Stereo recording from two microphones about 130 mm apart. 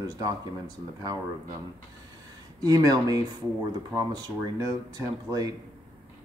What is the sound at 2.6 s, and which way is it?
Speech, 30° right (ahead or behind).